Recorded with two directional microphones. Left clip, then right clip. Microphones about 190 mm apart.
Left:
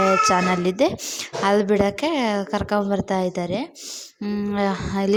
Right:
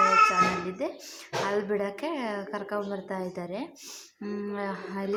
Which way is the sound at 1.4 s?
40° left (ahead or behind).